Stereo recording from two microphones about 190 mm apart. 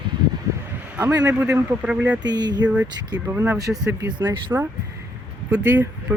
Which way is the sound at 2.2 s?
20° right (ahead or behind).